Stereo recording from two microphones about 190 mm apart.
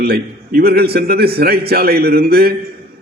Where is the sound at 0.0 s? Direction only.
55° right (ahead or behind).